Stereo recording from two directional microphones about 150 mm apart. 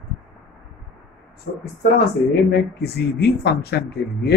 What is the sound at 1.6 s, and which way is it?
Speech, 90° left.